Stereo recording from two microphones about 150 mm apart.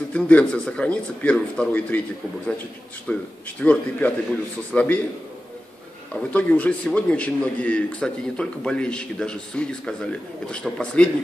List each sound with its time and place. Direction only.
0.1 s a man's voice: 10° left (ahead or behind)
6.1 s a man's voice: 10° left (ahead or behind)